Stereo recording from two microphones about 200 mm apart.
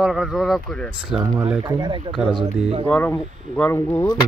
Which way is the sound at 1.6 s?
20° right (ahead or behind).